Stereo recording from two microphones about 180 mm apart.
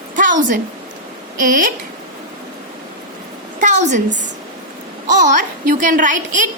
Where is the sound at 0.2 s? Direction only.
45° right (ahead or behind).